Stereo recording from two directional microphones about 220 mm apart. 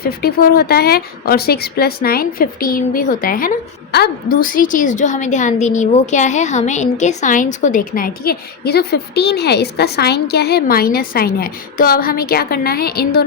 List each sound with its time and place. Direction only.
0.0 s a woman's voice: 45° left (ahead or behind)